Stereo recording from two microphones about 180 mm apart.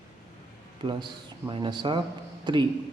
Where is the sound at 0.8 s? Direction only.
25° right (ahead or behind).